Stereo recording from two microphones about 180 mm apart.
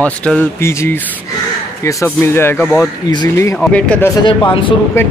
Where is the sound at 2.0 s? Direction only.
15° left (ahead or behind).